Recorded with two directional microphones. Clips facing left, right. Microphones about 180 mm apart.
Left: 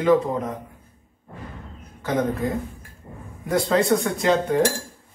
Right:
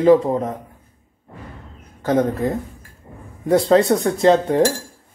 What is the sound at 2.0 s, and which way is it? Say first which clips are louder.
Speech: right 5 dB; 40° right (ahead or behind).